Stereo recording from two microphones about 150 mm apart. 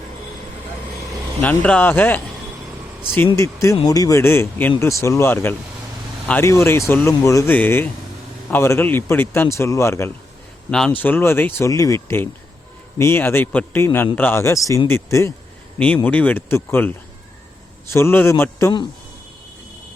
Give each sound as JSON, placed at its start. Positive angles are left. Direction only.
{"t": 1.4, "sound": "speech", "side_deg": 10}
{"t": 3.3, "sound": "speech", "side_deg": 20}
{"t": 10.7, "sound": "speech", "side_deg": 5}